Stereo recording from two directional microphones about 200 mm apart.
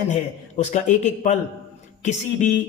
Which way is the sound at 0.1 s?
35° left (ahead or behind).